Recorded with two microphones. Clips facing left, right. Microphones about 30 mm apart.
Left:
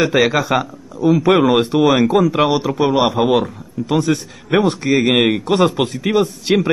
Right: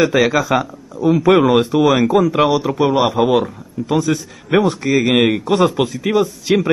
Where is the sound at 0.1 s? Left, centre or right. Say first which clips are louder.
Even; left.